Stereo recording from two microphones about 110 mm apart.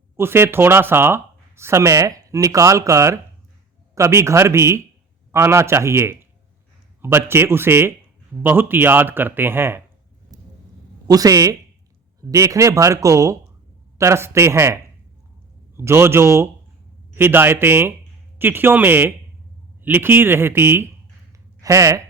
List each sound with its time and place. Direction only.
0.2 s speech: 20° right (ahead or behind)
10.3 s vehicle: 35° right (ahead or behind)
11.1 s speech: 30° right (ahead or behind)